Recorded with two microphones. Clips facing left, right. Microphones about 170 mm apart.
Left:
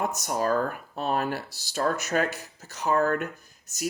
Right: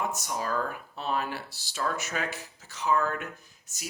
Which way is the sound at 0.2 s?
45° left (ahead or behind).